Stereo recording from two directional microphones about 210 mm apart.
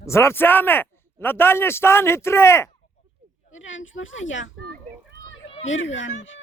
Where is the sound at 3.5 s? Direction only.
65° left (ahead or behind).